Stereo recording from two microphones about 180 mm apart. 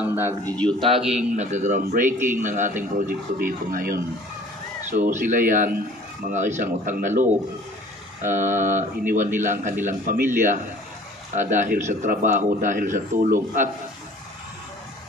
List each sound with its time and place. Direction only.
0.0 s a sound: 10° right (ahead or behind)
0.5 s speech: 5° left (ahead or behind)
0.7 s a man's voice: 30° right (ahead or behind); by 2.1 s 50° right (ahead or behind)
2.1 s a man's voice: 10° right (ahead or behind)
2.4 s a man's voice: 45° right (ahead or behind)